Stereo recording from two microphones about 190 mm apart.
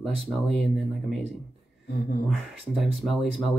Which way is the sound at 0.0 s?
Centre (ahead or behind).